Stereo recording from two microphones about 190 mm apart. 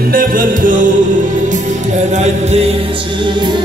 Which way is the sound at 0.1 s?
45° right (ahead or behind).